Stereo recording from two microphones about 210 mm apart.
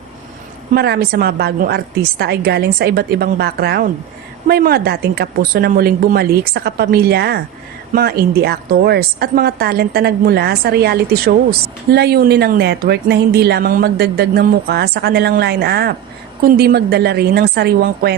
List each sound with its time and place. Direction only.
0.7 s speech: 45° right (ahead or behind)